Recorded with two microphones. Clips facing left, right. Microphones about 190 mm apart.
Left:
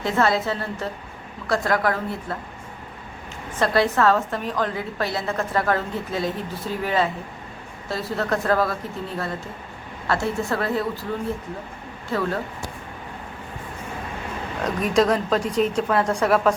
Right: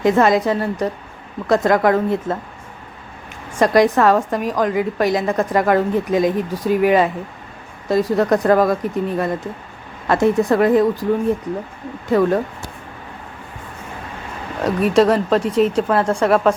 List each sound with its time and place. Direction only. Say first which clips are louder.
0.0 s a woman's voice: right 7 dB; 15° right (ahead or behind)
3.6 s a woman's voice: right 6 dB; 15° right (ahead or behind)
12.0 s a woman's voice: right 9 dB; 15° right (ahead or behind)
14.8 s a woman's voice: right 5 dB; 5° right (ahead or behind)